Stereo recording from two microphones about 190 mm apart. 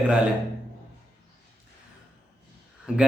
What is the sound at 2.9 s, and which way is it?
Speech, 5° right (ahead or behind).